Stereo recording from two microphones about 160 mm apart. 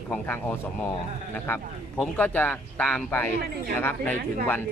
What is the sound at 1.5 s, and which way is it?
Speech, 15° left (ahead or behind).